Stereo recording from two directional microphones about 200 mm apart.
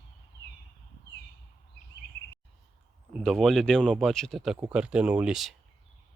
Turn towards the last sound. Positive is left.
turn(degrees=-5)  # may be behind; listen again after turning